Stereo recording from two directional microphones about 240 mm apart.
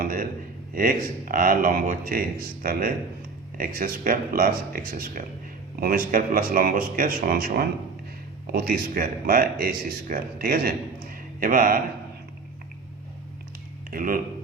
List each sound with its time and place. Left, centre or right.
0.0 s a man's voice: right
13.9 s speech: right